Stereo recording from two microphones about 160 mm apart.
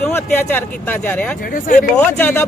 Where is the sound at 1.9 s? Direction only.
10° left (ahead or behind).